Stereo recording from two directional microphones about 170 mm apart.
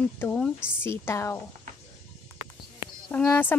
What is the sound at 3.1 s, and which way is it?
Speech, 10° left (ahead or behind).